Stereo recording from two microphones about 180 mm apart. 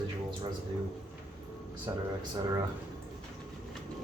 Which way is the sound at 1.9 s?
20° right (ahead or behind).